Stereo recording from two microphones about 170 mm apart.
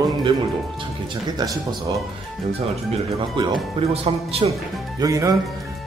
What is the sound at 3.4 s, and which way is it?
Speech, 30° right (ahead or behind).